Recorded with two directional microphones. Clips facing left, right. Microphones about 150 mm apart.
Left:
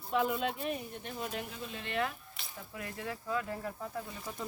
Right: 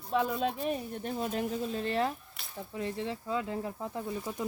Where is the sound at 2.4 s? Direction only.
Centre (ahead or behind).